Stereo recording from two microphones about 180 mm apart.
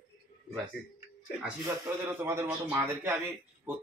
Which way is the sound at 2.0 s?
15° right (ahead or behind).